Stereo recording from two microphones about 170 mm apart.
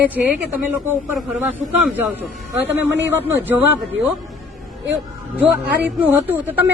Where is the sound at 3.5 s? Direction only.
10° right (ahead or behind).